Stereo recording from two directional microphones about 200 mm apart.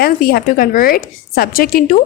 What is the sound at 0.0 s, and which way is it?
A woman's voice, 50° left (ahead or behind).